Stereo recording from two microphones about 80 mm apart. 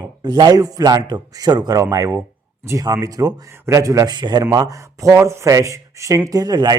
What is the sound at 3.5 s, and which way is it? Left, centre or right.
Speech, right.